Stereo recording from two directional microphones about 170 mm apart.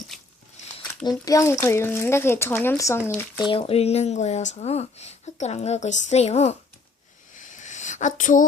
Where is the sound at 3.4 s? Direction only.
30° left (ahead or behind).